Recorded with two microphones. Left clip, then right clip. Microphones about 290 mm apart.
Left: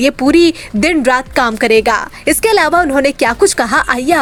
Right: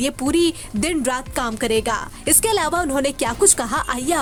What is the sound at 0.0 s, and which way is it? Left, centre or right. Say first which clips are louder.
Speech: left 10 dB; right.